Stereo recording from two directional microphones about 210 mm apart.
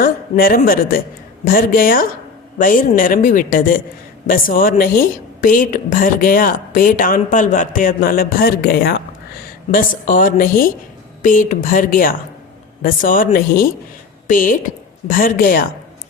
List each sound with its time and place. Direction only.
0.0 s a woman's voice: 45° left (ahead or behind)